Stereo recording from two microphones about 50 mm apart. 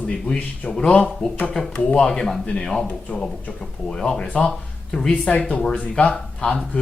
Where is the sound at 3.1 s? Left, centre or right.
Left.